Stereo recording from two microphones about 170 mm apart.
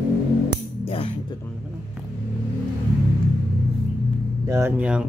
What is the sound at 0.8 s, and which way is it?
Music, 35° left (ahead or behind).